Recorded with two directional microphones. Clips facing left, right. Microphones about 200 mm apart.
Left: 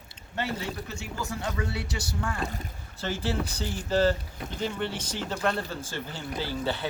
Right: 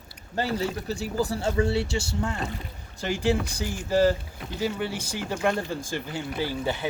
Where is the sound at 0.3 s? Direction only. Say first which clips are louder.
Right 5 dB; 35° right (ahead or behind).